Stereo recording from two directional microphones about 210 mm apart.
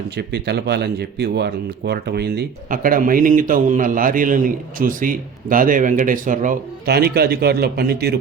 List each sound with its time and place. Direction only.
0.2 s speech: 55° right (ahead or behind)